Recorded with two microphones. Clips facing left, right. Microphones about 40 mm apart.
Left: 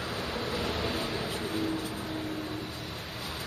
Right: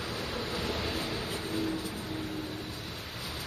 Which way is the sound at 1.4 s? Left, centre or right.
Left.